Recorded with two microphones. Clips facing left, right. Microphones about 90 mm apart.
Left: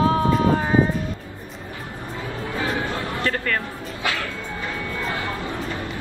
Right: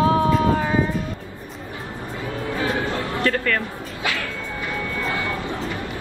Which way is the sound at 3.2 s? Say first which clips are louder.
Right 3 dB; 25° left (ahead or behind).